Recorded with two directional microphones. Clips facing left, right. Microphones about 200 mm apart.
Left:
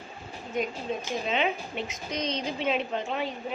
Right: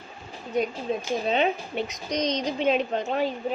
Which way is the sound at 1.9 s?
40° right (ahead or behind).